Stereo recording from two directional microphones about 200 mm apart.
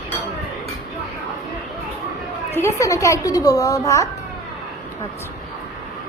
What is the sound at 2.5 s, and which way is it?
A child's voice, 15° left (ahead or behind).